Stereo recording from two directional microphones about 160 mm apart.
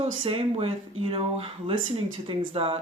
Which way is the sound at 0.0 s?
35° right (ahead or behind).